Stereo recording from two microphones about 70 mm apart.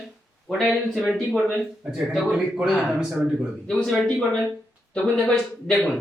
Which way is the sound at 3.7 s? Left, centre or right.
Centre.